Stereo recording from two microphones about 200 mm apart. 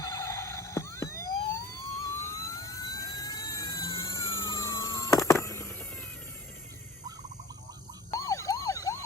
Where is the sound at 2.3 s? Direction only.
15° left (ahead or behind).